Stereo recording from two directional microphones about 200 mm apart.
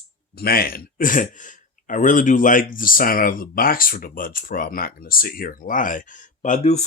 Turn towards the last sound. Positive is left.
turn(degrees=35)  # may be behind; listen again after turning